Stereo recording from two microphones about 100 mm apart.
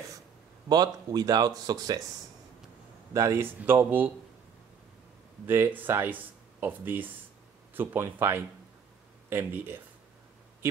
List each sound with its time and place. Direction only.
0.7 s speech: 40° right (ahead or behind)
3.1 s speech: 30° right (ahead or behind)
5.5 s speech: 20° right (ahead or behind)